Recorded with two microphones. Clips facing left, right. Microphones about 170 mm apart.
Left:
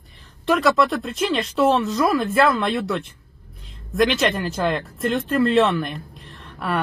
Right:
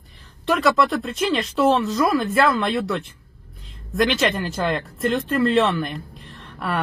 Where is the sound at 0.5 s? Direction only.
Centre (ahead or behind).